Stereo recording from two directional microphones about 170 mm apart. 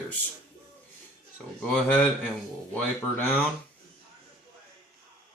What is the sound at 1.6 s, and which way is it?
Speech, 5° left (ahead or behind).